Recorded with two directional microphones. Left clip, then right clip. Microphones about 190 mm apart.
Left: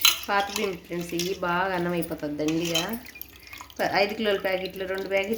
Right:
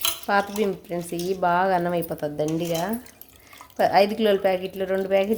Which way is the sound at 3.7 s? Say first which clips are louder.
Right 5 dB; 60° right (ahead or behind).